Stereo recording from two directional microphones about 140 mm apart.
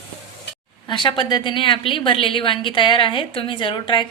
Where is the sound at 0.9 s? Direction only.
35° left (ahead or behind).